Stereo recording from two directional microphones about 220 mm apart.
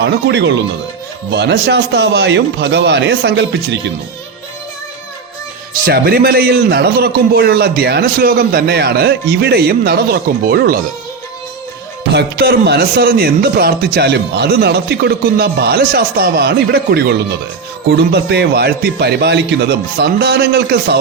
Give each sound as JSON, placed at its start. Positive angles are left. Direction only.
{"t": 0.0, "sound": "speech", "side_deg": -50}
{"t": 5.8, "sound": "speech", "side_deg": -40}
{"t": 12.1, "sound": "speech", "side_deg": -50}